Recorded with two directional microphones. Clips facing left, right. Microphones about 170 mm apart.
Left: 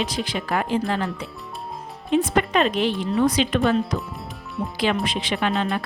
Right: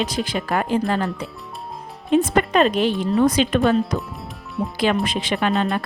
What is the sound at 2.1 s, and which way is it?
Speech, 40° right (ahead or behind).